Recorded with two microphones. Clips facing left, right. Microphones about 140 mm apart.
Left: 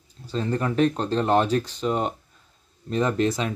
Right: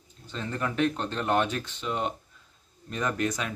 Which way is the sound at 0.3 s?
35° left (ahead or behind).